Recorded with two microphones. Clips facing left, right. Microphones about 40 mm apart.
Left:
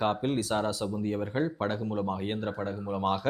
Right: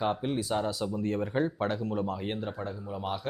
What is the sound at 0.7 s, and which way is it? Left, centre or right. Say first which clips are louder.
Speech: left 1 dB; left.